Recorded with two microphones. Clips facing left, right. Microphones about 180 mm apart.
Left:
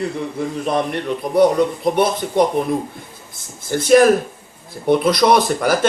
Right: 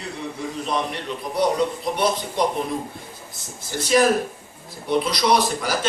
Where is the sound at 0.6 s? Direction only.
55° left (ahead or behind).